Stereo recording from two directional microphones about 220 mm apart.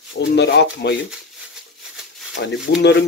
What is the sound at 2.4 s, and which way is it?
Speech, 45° left (ahead or behind).